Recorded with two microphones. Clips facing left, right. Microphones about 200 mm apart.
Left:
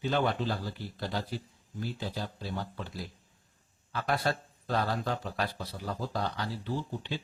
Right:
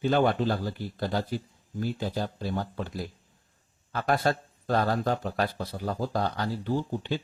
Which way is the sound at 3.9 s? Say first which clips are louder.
Right 5 dB; 50° right (ahead or behind).